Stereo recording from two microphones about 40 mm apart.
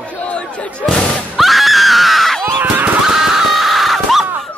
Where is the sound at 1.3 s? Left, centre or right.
Centre.